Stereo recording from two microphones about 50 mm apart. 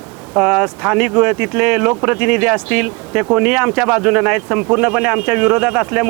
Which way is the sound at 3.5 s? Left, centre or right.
Centre.